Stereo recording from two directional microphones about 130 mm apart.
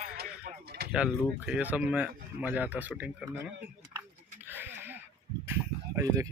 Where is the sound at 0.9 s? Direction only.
5° right (ahead or behind).